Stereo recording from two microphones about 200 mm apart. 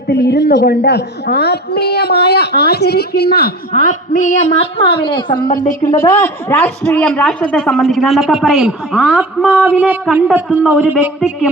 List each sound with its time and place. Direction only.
0.1 s a woman's voice: 55° left (ahead or behind)
3.8 s a woman's voice: 40° left (ahead or behind); by 11.4 s centre (ahead or behind)